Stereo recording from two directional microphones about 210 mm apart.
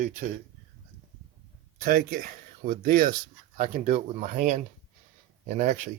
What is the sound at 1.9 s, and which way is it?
Speech, 40° right (ahead or behind).